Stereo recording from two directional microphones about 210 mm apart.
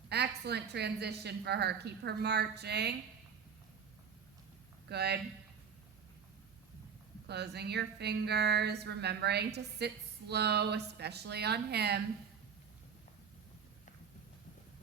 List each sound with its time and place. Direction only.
0.1 s speech: 50° right (ahead or behind)
4.9 s speech: 50° right (ahead or behind)
7.3 s speech: 50° right (ahead or behind)